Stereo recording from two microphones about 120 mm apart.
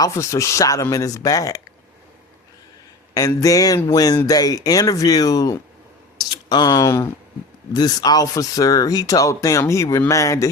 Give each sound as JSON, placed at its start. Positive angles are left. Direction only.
{"t": 0.0, "sound": "speech", "side_deg": 25}
{"t": 3.2, "sound": "speech", "side_deg": 30}